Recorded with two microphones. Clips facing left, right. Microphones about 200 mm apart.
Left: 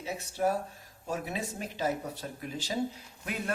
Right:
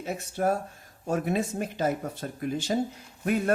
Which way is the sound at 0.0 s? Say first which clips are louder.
Right 3 dB; 50° right (ahead or behind).